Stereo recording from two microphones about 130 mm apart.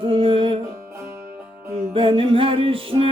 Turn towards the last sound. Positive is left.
turn(degrees=-45)  # may be behind; listen again after turning